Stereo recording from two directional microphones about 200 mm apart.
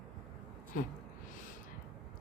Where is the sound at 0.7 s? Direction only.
45° left (ahead or behind).